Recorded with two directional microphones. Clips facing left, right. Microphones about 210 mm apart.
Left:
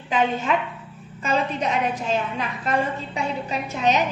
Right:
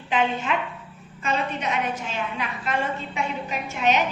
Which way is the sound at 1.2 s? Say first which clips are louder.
Left 3 dB; 40° left (ahead or behind).